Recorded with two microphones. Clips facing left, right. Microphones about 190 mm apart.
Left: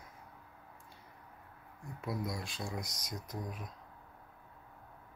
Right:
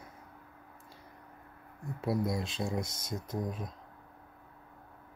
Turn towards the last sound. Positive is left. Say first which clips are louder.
# right 6 dB
turn(degrees=-25)  # may be behind; listen again after turning